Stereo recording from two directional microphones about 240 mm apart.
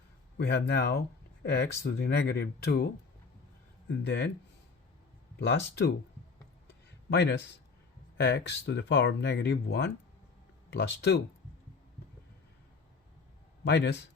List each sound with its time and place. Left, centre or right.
0.3 s speech: left
5.4 s speech: left
6.7 s a sound: left
8.2 s speech: left
13.7 s speech: left